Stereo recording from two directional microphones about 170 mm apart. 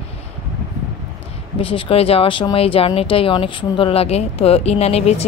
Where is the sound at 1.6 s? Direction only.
35° left (ahead or behind).